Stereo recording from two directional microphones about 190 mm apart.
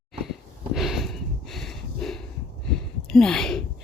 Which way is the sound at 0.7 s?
Centre (ahead or behind).